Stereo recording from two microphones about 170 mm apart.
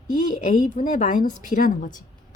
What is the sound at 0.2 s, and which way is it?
A woman's voice, 50° left (ahead or behind).